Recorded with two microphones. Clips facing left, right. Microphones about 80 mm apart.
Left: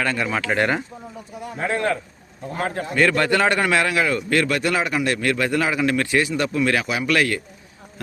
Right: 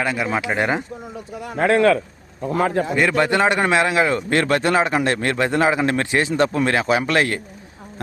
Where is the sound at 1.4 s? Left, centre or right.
Right.